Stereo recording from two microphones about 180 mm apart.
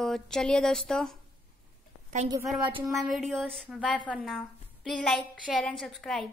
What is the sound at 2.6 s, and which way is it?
Speech, 25° right (ahead or behind).